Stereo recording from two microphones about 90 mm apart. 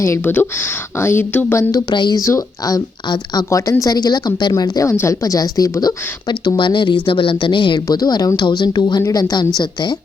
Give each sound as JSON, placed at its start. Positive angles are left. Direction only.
{"t": 0.0, "sound": "a woman's voice", "side_deg": 30}
{"t": 1.9, "sound": "speech", "side_deg": 50}
{"t": 2.2, "sound": "a woman's voice", "side_deg": 40}
{"t": 6.2, "sound": "speech", "side_deg": 55}
{"t": 7.9, "sound": "speech", "side_deg": 45}